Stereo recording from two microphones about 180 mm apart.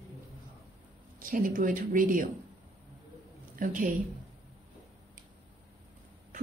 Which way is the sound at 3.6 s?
50° right (ahead or behind).